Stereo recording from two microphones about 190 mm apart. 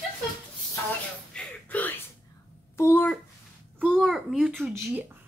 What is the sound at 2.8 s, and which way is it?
Speech, 10° left (ahead or behind).